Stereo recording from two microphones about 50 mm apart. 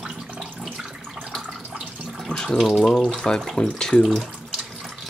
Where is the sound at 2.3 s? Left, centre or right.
Centre.